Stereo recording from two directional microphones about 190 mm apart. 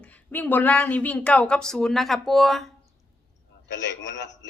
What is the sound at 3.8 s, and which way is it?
Speech, 70° left (ahead or behind).